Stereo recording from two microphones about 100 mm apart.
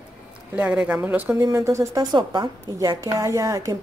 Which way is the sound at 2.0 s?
50° right (ahead or behind).